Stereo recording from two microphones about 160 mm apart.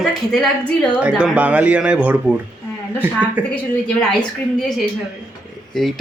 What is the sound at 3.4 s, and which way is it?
Speech, 10° right (ahead or behind).